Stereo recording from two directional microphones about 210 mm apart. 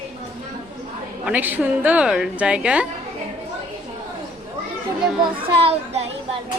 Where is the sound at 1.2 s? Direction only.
5° right (ahead or behind).